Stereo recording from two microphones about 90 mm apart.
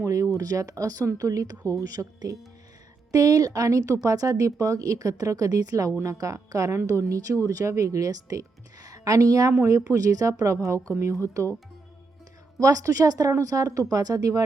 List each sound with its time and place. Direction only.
0.0 s a woman's voice: 35° right (ahead or behind)
12.5 s a woman's voice: 40° right (ahead or behind)